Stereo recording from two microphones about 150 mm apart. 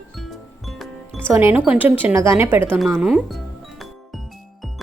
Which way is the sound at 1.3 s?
15° right (ahead or behind).